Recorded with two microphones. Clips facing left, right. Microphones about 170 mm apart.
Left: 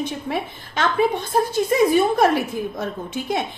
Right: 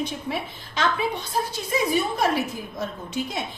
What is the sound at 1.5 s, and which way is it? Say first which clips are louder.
Speech: left 8 dB; 55° left (ahead or behind).